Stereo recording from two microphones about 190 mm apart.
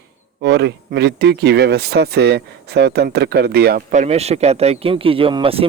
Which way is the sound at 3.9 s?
35° right (ahead or behind).